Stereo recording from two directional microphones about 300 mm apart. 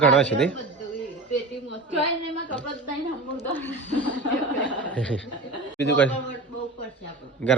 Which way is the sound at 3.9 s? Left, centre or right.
Right.